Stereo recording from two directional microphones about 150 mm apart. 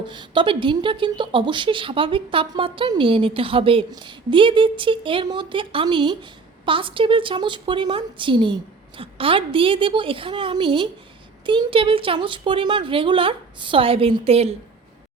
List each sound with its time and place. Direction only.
0.1 s speech: 35° right (ahead or behind)